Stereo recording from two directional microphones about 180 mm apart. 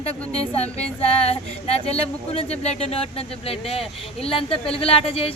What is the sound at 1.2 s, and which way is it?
Speech, 35° left (ahead or behind).